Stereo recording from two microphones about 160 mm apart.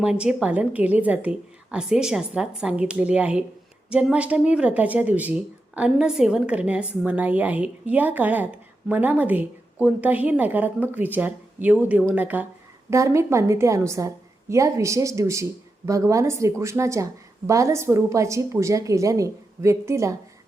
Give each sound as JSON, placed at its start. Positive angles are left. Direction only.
{"t": 0.0, "sound": "a woman's voice", "side_deg": -5}